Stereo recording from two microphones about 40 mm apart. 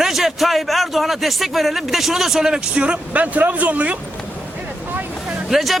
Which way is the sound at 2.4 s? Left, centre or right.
Right.